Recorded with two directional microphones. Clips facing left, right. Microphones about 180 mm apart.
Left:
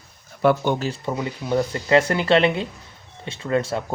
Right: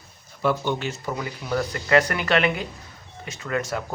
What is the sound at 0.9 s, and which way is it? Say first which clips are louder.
Speech: left 3 dB; 25° left (ahead or behind).